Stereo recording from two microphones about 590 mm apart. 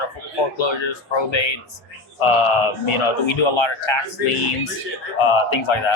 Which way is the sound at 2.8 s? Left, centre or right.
Left.